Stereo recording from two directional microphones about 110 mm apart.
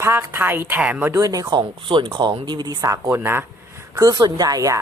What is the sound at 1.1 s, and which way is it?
Speech, 30° right (ahead or behind).